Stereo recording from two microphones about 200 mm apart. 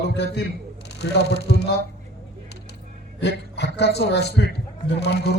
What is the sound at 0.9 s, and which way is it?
Speech, 55° left (ahead or behind).